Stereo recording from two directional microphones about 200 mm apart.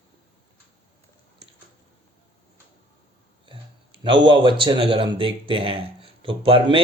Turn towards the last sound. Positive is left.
turn(degrees=-25)  # may be behind; listen again after turning